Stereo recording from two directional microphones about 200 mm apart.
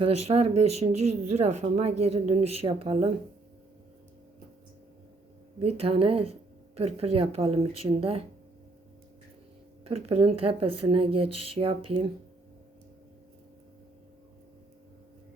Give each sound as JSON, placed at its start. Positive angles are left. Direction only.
{"t": 0.0, "sound": "speech", "side_deg": -30}
{"t": 5.5, "sound": "speech", "side_deg": -30}
{"t": 9.8, "sound": "speech", "side_deg": -30}